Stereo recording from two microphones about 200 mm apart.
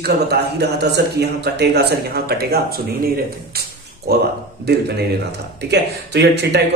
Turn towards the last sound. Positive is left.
turn(degrees=-55)  # may be behind; listen again after turning